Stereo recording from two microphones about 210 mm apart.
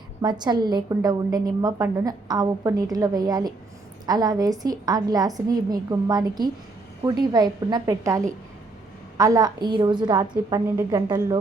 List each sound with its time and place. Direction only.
0.2 s a woman's voice: 20° right (ahead or behind)